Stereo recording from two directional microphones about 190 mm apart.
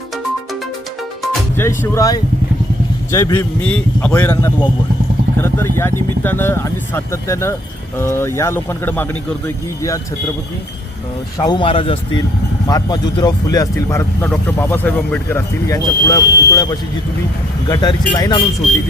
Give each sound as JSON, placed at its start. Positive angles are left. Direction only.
{"t": 1.5, "sound": "speech", "side_deg": 10}
{"t": 11.3, "sound": "speech", "side_deg": 25}